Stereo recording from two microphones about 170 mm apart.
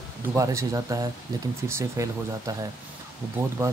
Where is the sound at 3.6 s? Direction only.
15° right (ahead or behind).